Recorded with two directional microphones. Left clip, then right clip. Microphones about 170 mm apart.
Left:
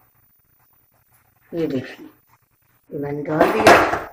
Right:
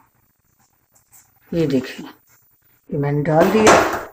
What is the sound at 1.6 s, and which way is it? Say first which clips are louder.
Speech: right 4 dB; 75° right (ahead or behind).